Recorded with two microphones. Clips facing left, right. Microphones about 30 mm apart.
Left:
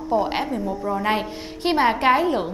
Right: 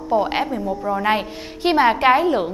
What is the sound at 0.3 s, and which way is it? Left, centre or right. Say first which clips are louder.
A woman's voice: right 2 dB; centre.